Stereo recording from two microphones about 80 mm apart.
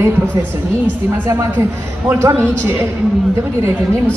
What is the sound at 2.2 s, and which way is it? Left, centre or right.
Speech, right.